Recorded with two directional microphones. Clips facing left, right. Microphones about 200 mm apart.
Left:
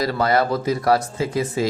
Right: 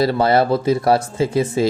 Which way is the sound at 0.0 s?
30° right (ahead or behind).